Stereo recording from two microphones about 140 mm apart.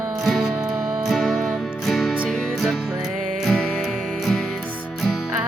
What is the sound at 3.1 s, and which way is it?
Music, 75° right (ahead or behind).